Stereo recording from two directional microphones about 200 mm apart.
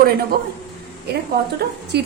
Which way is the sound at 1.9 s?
55° right (ahead or behind).